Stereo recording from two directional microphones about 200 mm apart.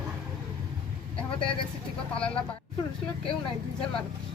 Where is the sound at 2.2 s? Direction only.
5° left (ahead or behind).